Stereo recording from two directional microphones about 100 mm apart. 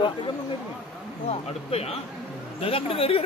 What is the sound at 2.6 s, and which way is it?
Speech, 70° left (ahead or behind).